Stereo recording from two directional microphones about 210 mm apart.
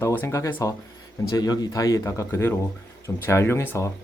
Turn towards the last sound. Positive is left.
turn(degrees=15)  # may be behind; listen again after turning